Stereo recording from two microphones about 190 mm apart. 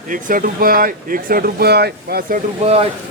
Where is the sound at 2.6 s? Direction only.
35° right (ahead or behind).